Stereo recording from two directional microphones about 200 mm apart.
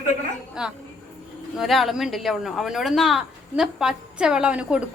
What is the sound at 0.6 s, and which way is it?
Speech, 5° right (ahead or behind).